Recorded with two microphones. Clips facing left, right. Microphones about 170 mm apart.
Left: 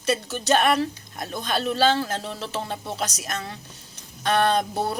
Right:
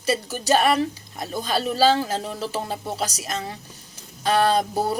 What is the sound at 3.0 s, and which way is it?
Speech, 30° right (ahead or behind).